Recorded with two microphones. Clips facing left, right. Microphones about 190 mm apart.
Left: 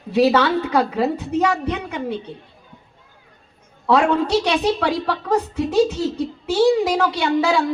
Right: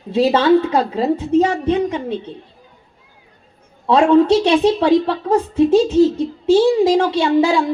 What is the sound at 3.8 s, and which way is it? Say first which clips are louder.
A woman's voice: right 6 dB; 25° right (ahead or behind).